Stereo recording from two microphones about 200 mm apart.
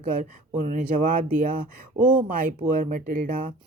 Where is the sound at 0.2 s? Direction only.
40° right (ahead or behind).